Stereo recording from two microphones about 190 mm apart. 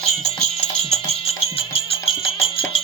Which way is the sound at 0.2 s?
35° left (ahead or behind).